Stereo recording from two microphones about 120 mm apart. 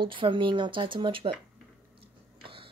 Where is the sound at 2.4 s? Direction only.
45° right (ahead or behind).